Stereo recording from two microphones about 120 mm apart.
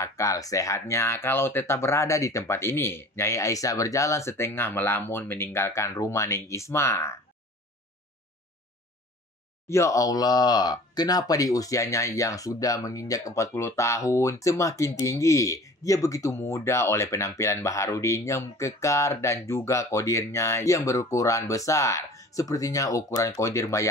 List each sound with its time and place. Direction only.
0.0 s speech: 30° left (ahead or behind)
9.7 s speech: 25° left (ahead or behind)